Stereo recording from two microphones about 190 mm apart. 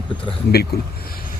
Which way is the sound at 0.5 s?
55° left (ahead or behind).